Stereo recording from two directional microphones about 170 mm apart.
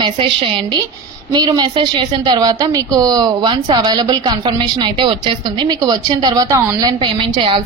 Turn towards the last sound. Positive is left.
turn(degrees=-30)  # may be behind; listen again after turning